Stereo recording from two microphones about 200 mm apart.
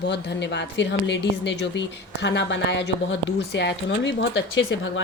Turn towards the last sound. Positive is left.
turn(degrees=65)  # may be behind; listen again after turning